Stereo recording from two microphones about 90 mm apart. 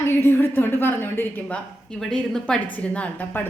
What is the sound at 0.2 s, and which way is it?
A woman's voice, 25° left (ahead or behind).